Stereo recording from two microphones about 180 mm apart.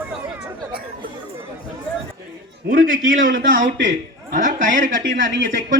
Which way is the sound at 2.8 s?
90° right.